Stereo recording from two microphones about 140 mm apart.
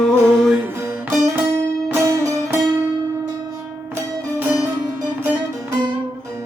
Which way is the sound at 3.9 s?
20° right (ahead or behind).